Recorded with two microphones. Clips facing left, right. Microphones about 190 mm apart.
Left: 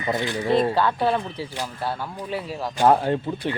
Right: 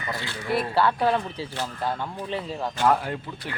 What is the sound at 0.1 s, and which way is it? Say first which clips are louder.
Speech: left 6 dB; 20° left (ahead or behind).